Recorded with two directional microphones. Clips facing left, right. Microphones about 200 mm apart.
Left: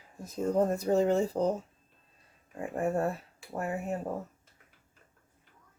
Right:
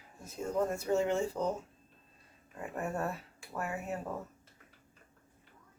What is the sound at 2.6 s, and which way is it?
Speech, 30° left (ahead or behind).